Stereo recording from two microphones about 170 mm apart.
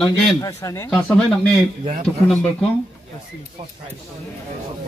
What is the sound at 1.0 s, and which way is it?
Speech, 5° left (ahead or behind).